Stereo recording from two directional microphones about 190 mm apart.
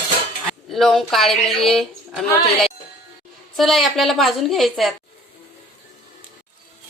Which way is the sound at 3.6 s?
Centre (ahead or behind).